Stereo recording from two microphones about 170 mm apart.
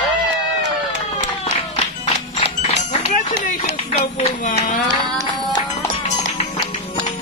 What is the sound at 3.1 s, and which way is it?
Run, 50° left (ahead or behind).